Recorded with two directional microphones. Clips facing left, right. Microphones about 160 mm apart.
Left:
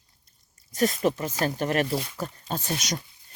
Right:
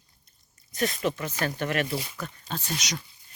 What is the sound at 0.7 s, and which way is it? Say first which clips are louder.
Speech: left 4 dB; 40° left (ahead or behind).